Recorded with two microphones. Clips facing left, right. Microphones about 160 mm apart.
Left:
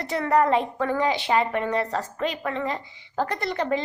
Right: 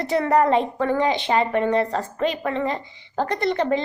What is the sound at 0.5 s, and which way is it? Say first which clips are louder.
A woman's voice: right 3 dB; 5° left (ahead or behind).